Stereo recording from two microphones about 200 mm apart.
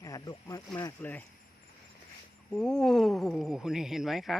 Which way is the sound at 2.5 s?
5° left (ahead or behind).